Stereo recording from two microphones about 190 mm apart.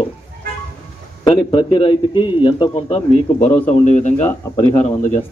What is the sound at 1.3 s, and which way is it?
A man's voice, 25° left (ahead or behind).